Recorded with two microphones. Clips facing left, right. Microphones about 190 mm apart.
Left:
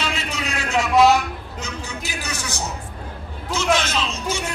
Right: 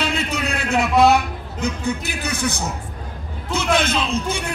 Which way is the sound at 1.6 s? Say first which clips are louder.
Right 10 dB; 55° right (ahead or behind).